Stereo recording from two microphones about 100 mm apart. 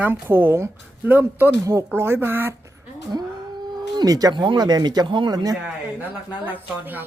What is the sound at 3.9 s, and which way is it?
Speech, 40° right (ahead or behind).